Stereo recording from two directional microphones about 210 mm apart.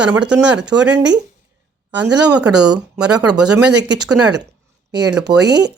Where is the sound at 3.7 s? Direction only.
55° right (ahead or behind).